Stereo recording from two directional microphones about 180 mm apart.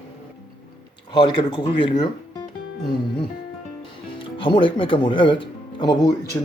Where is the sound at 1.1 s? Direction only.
25° left (ahead or behind).